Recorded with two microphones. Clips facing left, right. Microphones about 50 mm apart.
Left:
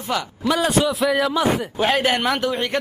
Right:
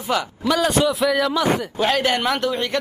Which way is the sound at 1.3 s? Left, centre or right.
Centre.